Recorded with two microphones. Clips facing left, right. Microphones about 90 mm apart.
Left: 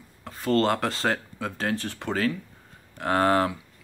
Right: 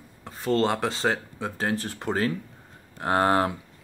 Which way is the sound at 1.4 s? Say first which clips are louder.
Right 1 dB; 25° right (ahead or behind).